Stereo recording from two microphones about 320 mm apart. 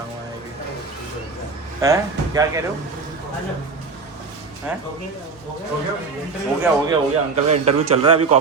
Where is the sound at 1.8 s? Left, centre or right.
Centre.